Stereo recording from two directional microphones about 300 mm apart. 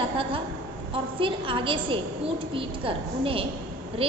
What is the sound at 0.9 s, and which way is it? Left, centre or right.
A woman's voice, centre.